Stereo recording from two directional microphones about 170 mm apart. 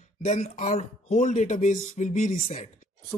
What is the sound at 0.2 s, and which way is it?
A man's voice, 45° left (ahead or behind).